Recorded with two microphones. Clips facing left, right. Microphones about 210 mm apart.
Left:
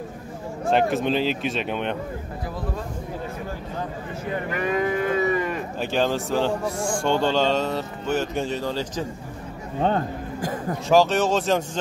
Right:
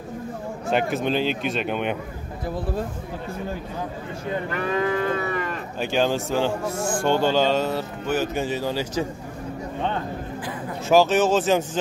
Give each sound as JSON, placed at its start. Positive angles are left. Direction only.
{"t": 0.7, "sound": "speech", "side_deg": 0}
{"t": 4.5, "sound": "cattle", "side_deg": 15}
{"t": 5.8, "sound": "speech", "side_deg": 0}
{"t": 9.8, "sound": "a sound", "side_deg": 40}
{"t": 10.9, "sound": "speech", "side_deg": -5}